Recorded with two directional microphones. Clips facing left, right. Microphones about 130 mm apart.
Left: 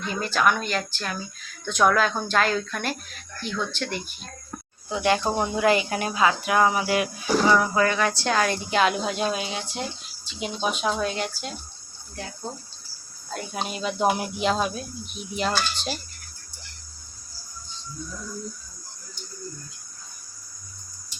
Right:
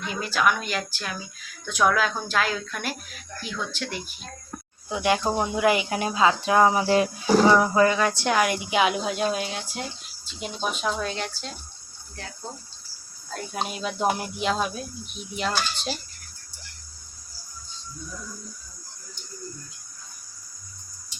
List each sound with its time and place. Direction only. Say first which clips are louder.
0.2 s speech: left 1 dB; 5° right (ahead or behind)
4.9 s speech: even; 15° right (ahead or behind); by 11.5 s 5° left (ahead or behind)
13.3 s speech: even; centre (ahead or behind)